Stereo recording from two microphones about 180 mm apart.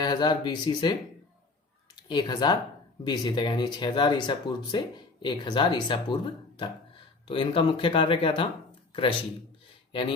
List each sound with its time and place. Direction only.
0.0 s speech: 25° left (ahead or behind)
2.0 s speech: 25° left (ahead or behind)